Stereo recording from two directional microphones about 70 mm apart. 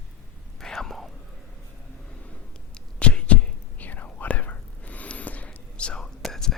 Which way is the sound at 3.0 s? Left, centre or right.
Centre.